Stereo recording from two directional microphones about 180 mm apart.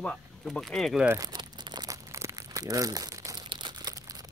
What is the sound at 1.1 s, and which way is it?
Crumpling, 20° right (ahead or behind).